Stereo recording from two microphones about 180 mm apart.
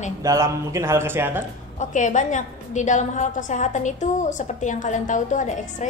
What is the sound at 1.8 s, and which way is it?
A woman's voice, 45° left (ahead or behind).